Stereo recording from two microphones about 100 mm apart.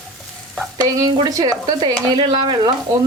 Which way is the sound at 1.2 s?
40° right (ahead or behind).